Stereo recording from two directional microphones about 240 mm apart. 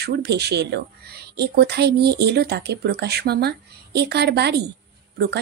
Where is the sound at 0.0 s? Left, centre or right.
Right.